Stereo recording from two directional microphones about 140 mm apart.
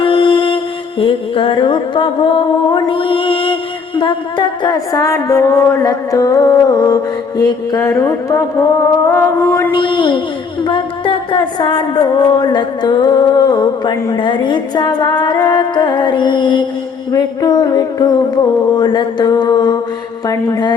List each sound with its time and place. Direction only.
0.0 s music: 40° left (ahead or behind); by 8.6 s 20° left (ahead or behind)
9.0 s mantra: 20° left (ahead or behind)
9.7 s music: 35° left (ahead or behind)